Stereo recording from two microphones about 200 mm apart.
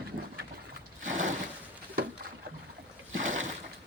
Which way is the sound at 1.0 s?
40° right (ahead or behind).